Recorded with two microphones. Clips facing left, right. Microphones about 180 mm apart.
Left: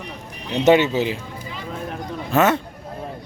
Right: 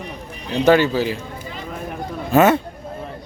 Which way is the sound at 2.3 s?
10° right (ahead or behind).